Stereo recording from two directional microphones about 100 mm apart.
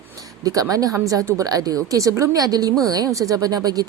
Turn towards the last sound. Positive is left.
turn(degrees=-40)  # may be behind; listen again after turning